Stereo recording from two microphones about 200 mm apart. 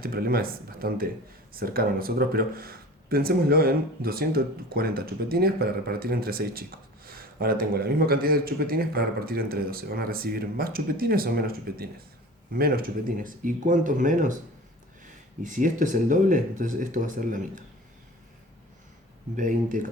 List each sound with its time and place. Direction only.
0.0 s speech: 50° right (ahead or behind)
15.4 s speech: 40° right (ahead or behind)
19.4 s speech: 40° right (ahead or behind)